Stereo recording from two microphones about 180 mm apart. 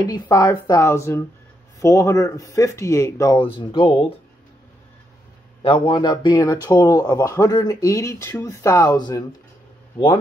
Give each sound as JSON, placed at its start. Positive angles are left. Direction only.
{"t": 0.0, "sound": "speech", "side_deg": 20}
{"t": 5.6, "sound": "speech", "side_deg": 30}